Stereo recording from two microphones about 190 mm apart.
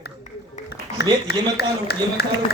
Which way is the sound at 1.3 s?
60° left (ahead or behind).